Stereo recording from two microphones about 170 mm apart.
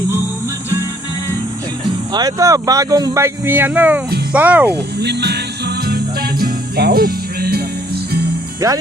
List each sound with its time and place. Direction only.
2.1 s speech: 20° right (ahead or behind)
4.7 s music: 75° right (ahead or behind)
6.4 s music: 65° right (ahead or behind)
8.6 s speech: 20° right (ahead or behind)